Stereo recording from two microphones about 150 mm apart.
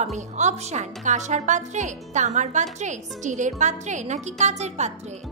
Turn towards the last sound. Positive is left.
turn(degrees=-50)  # may be behind; listen again after turning